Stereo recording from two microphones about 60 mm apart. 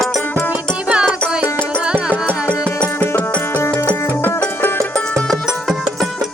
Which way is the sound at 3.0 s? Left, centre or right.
Left.